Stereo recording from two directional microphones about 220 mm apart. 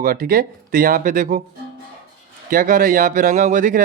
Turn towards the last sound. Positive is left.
turn(degrees=-35)  # may be behind; listen again after turning